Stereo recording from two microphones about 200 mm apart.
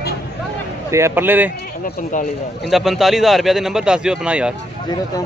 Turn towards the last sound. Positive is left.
turn(degrees=-5)  # may be behind; listen again after turning